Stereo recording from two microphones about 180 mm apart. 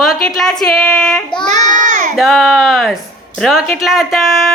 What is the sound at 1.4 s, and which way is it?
Child singing, 40° right (ahead or behind).